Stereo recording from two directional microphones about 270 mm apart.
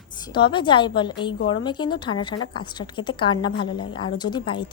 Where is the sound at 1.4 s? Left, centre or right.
Left.